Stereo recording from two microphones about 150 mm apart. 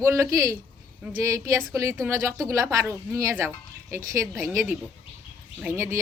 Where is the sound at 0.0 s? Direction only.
20° right (ahead or behind).